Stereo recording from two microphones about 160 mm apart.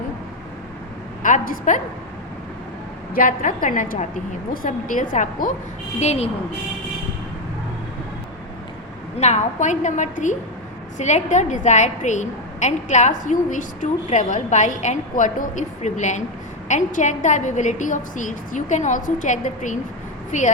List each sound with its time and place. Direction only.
1.2 s a woman's voice: 55° left (ahead or behind)
3.2 s a woman's voice: 55° left (ahead or behind)
9.1 s a woman's voice: 45° left (ahead or behind)